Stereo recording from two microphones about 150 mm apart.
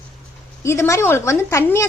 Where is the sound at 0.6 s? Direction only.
20° left (ahead or behind).